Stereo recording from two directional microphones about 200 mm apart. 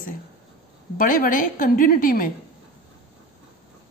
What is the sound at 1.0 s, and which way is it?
A woman's voice, 45° left (ahead or behind).